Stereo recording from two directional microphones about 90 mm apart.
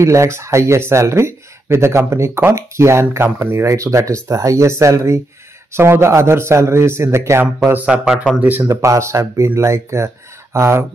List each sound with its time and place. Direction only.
0.0 s a man's voice: 35° right (ahead or behind)
7.8 s a man's voice: 10° right (ahead or behind)
8.6 s speech: 35° right (ahead or behind)